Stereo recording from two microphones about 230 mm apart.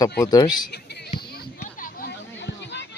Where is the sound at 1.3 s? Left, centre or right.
Left.